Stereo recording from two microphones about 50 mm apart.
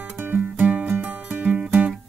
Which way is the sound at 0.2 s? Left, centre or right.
Right.